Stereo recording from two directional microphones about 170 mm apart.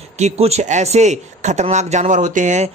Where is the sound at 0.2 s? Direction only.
40° right (ahead or behind).